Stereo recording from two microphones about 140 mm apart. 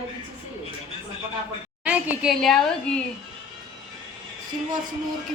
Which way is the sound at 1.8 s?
10° right (ahead or behind).